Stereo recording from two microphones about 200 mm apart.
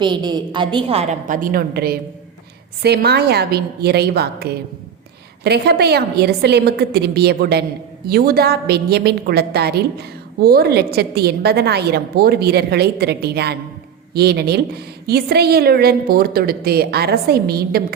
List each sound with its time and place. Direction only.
0.0 s a woman's voice: 20° right (ahead or behind); by 17.8 s 50° right (ahead or behind)